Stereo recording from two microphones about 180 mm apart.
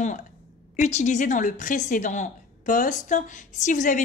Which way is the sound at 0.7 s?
40° left (ahead or behind).